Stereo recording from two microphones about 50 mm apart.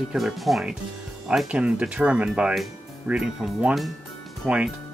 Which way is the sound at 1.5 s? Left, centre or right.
Right.